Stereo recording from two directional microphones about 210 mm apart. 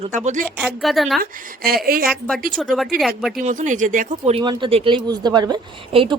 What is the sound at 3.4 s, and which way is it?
Speech, 35° right (ahead or behind).